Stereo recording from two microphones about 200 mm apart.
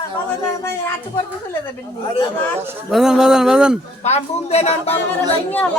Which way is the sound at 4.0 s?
35° left (ahead or behind).